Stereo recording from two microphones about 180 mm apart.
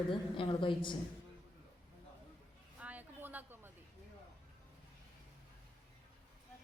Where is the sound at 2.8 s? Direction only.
10° right (ahead or behind).